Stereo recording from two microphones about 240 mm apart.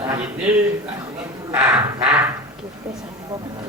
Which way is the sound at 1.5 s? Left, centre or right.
Centre.